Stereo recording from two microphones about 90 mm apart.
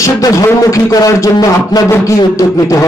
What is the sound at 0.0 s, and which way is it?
A man's voice, 35° left (ahead or behind).